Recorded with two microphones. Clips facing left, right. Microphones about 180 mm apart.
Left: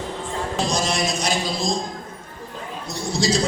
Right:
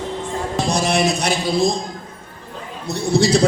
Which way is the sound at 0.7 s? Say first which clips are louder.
Right 9 dB; 60° right (ahead or behind).